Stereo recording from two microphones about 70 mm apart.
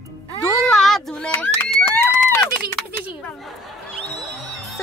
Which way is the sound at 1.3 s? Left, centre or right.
Left.